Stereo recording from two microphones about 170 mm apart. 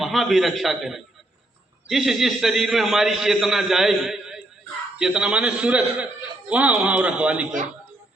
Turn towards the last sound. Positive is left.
turn(degrees=-5)  # may be behind; listen again after turning